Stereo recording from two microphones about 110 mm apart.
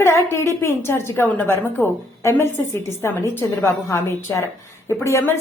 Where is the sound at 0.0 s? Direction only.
25° left (ahead or behind).